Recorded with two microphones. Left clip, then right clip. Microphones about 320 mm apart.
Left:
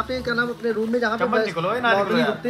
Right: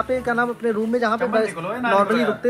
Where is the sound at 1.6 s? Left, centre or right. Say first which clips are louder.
Right 1 dB; left.